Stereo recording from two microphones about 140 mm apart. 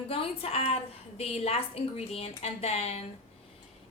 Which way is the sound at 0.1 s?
45° left (ahead or behind).